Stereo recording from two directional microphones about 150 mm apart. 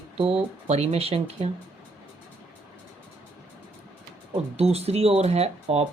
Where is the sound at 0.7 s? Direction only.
45° right (ahead or behind).